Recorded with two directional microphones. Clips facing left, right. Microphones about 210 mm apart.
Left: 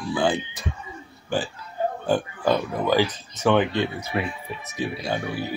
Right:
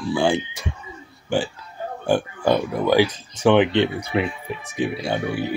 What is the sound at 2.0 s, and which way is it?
Speech, 15° right (ahead or behind).